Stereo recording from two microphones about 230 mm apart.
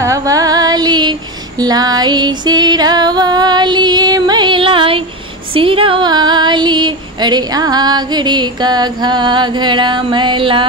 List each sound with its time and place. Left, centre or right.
0.0 s music: centre
1.6 s female singing: centre